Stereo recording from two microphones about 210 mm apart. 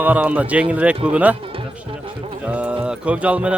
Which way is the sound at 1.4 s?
25° right (ahead or behind).